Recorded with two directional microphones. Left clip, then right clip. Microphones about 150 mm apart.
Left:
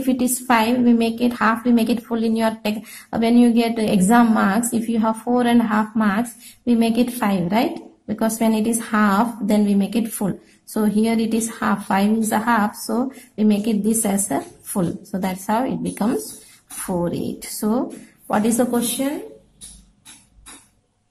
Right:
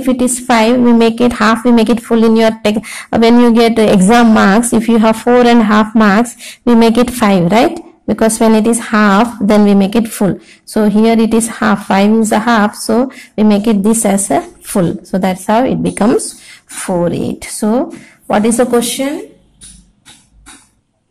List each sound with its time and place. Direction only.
0.1 s a woman's voice: 25° right (ahead or behind)